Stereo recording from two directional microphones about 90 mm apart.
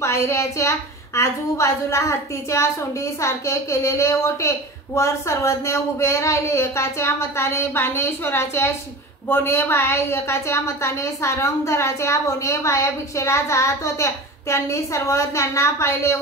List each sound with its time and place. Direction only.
0.0 s a woman's voice: 30° left (ahead or behind)